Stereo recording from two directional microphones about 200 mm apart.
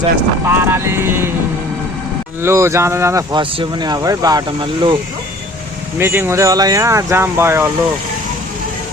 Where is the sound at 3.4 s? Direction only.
25° right (ahead or behind).